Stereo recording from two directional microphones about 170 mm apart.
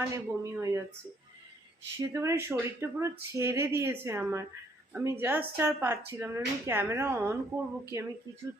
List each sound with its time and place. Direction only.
0.0 s speech: 15° right (ahead or behind)
2.0 s speech: 15° right (ahead or behind)